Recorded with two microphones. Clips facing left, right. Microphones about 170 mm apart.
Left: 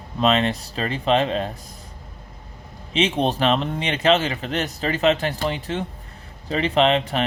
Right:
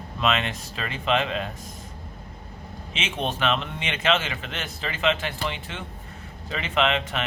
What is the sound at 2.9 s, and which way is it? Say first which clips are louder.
Speech: left 9 dB; 35° left (ahead or behind).